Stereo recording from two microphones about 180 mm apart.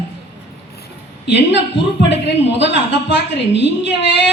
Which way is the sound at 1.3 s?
75° left (ahead or behind).